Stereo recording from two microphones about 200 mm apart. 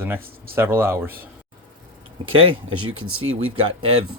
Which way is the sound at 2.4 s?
25° right (ahead or behind).